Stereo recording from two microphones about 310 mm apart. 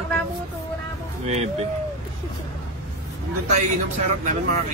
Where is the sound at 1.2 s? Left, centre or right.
Right.